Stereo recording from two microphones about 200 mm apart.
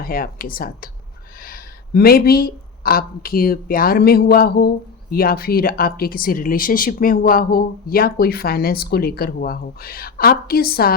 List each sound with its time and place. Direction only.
0.0 s speech: 45° left (ahead or behind)